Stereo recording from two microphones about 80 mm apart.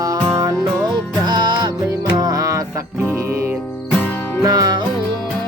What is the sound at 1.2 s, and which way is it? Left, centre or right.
Music, right.